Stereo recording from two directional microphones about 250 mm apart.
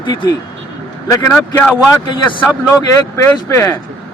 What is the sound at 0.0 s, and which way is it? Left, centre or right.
Speech, centre.